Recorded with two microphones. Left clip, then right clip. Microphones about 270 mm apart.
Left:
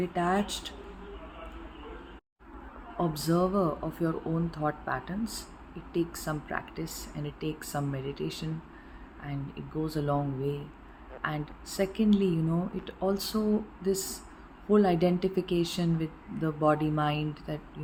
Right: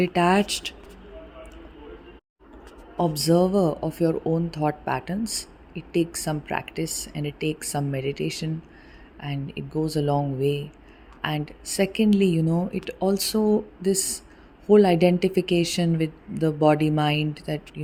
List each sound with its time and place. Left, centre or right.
0.0 s speech: right
3.0 s speech: right